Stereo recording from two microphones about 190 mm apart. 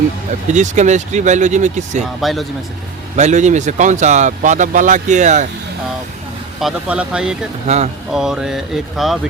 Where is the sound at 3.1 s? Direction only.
40° right (ahead or behind).